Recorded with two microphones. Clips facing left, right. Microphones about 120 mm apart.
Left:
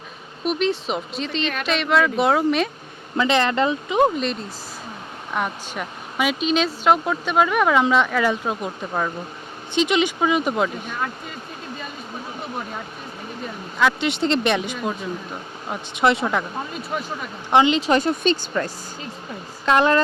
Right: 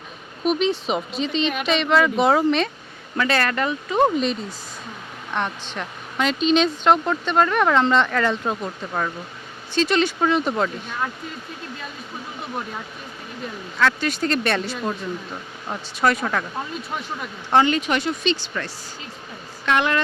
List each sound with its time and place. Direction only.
0.4 s speech: centre (ahead or behind)
3.2 s speech: 20° left (ahead or behind)
4.0 s speech: centre (ahead or behind)
13.7 s speech: 20° left (ahead or behind)
16.0 s speech: 20° left (ahead or behind)
17.5 s speech: 15° left (ahead or behind)
17.7 s speech: 35° left (ahead or behind)
18.5 s speech: 35° left (ahead or behind)